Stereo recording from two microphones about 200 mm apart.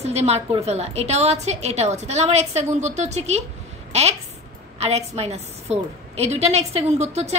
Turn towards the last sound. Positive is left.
turn(degrees=-35)  # may be behind; listen again after turning